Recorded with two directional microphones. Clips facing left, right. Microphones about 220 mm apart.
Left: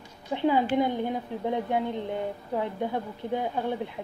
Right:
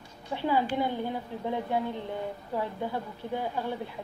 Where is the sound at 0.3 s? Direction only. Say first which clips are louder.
Left 4 dB; 20° left (ahead or behind).